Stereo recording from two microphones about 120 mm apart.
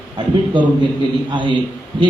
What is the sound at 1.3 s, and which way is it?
Speech, 45° right (ahead or behind).